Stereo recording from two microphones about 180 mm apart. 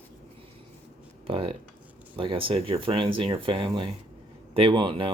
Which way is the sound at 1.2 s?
30° right (ahead or behind).